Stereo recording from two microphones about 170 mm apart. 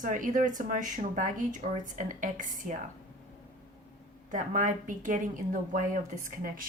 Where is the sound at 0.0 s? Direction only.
50° right (ahead or behind).